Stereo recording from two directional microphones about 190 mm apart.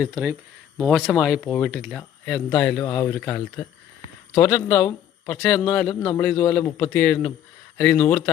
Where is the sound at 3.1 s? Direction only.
5° left (ahead or behind).